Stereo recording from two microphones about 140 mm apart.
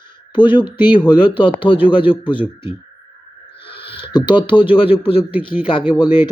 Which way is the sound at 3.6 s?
40° left (ahead or behind).